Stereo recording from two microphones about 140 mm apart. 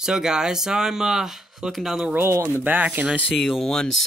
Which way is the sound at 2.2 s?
20° right (ahead or behind).